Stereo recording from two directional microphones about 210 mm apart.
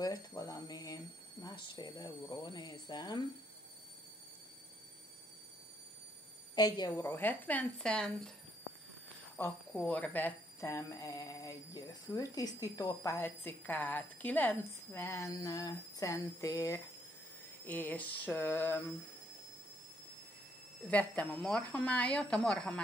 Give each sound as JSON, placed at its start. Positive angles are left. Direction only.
{"t": 0.0, "sound": "speech", "side_deg": 15}
{"t": 6.5, "sound": "speech", "side_deg": 20}
{"t": 9.4, "sound": "speech", "side_deg": 10}
{"t": 20.9, "sound": "speech", "side_deg": 5}